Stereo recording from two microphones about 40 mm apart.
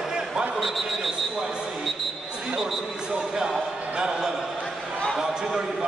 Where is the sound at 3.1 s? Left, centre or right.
Centre.